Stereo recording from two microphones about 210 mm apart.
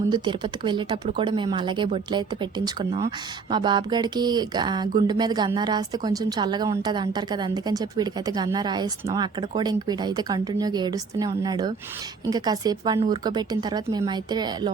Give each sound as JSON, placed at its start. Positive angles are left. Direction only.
{"t": 0.1, "sound": "speech", "side_deg": -20}